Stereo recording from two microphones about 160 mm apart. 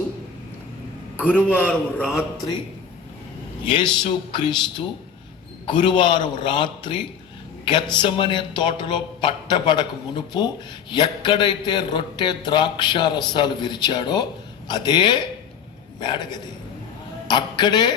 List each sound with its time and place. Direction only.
1.3 s a man's voice: 10° left (ahead or behind)
1.6 s a man's voice: centre (ahead or behind)
4.0 s speech: 30° left (ahead or behind)
5.6 s speech: 30° left (ahead or behind)